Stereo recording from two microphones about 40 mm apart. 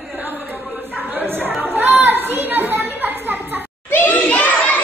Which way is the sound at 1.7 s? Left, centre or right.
Right.